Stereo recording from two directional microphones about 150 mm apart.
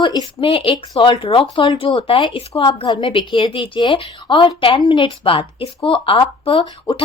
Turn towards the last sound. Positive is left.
turn(degrees=30)  # may be behind; listen again after turning